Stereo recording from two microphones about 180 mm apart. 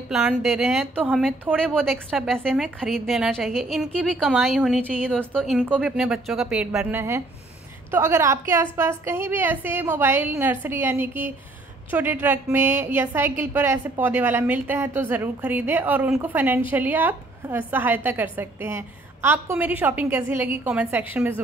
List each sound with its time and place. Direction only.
0.1 s a woman's voice: 5° right (ahead or behind)